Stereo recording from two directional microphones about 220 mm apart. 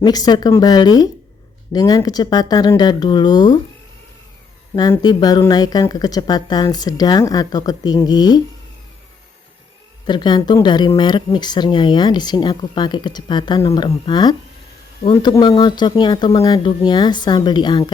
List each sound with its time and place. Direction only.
0.0 s a woman's voice: 20° left (ahead or behind)
4.7 s a woman's voice: 15° left (ahead or behind)
10.1 s speech: 20° left (ahead or behind)